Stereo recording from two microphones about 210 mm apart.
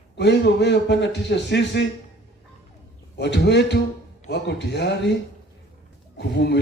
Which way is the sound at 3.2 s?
55° left (ahead or behind).